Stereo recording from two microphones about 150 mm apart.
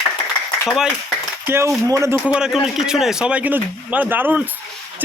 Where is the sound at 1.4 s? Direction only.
20° right (ahead or behind).